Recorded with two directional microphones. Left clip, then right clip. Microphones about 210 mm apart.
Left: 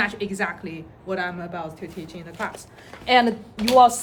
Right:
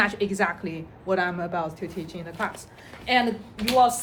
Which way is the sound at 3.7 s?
35° left (ahead or behind).